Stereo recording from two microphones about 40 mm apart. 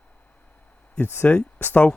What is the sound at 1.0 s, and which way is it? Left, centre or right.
Speech, left.